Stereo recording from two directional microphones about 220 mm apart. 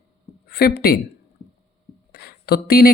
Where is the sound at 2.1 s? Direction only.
45° left (ahead or behind).